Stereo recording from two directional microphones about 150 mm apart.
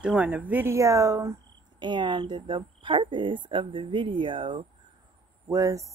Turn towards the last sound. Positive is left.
turn(degrees=-20)  # may be behind; listen again after turning